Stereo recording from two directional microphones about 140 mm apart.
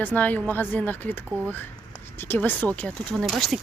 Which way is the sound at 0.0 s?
10° left (ahead or behind).